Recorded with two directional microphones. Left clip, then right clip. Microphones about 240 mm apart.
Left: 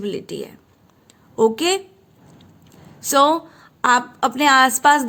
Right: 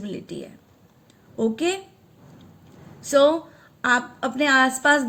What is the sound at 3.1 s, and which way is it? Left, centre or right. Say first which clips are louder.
A woman's voice: left 2 dB; left.